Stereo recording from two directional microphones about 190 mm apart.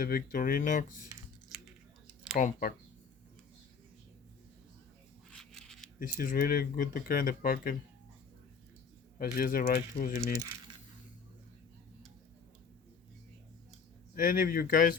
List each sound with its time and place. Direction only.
0.0 s speech: 50° left (ahead or behind)
2.4 s speech: 45° left (ahead or behind)
5.3 s a sound: 5° left (ahead or behind)
6.0 s speech: 50° left (ahead or behind)
9.1 s speech: 50° left (ahead or behind)
14.2 s speech: 45° left (ahead or behind)